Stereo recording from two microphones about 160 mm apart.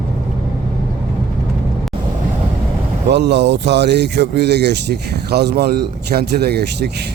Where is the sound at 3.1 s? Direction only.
90° right.